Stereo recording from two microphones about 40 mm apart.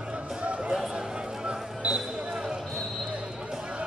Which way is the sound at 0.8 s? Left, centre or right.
Centre.